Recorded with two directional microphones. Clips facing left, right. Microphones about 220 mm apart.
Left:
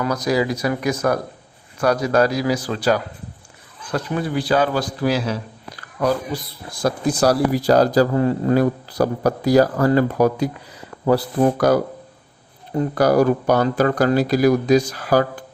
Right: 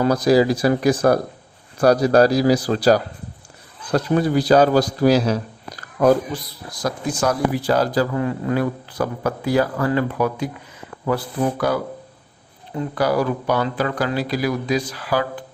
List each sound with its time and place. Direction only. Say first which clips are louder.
0.0 s a man's voice: right 5 dB; 30° right (ahead or behind)
6.7 s speech: left 4 dB; 35° left (ahead or behind)